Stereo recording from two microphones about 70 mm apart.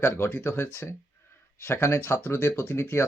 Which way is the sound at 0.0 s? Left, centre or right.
Left.